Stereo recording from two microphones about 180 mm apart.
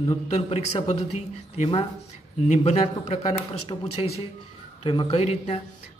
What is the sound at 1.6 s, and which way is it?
Speech, 35° left (ahead or behind).